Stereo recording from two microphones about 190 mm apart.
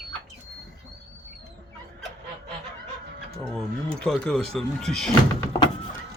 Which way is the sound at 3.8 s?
5° left (ahead or behind).